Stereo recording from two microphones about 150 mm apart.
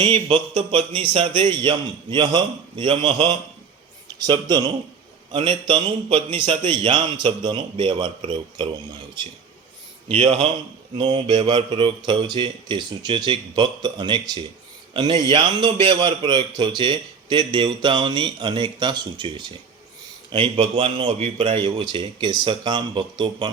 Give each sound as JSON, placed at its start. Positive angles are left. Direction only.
{"t": 0.0, "sound": "a man's voice", "side_deg": -35}
{"t": 10.1, "sound": "a man's voice", "side_deg": -40}